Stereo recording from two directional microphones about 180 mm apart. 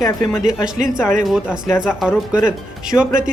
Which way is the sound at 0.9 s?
5° right (ahead or behind).